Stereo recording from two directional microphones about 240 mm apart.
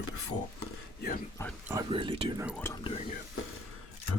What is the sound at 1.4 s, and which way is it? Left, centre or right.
Speech, centre.